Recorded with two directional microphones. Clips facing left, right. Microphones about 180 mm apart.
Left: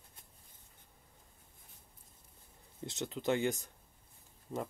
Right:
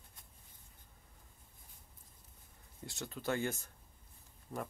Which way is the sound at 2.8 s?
20° left (ahead or behind).